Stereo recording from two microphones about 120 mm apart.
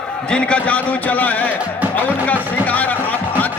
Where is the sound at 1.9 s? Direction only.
15° left (ahead or behind).